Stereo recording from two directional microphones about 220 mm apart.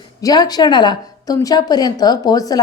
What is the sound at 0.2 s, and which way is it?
A woman's voice, 15° left (ahead or behind).